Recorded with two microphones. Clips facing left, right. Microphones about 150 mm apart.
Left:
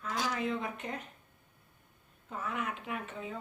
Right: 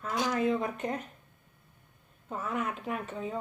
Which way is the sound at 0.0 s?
45° right (ahead or behind).